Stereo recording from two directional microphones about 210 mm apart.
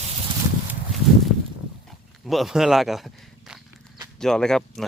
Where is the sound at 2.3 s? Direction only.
Centre (ahead or behind).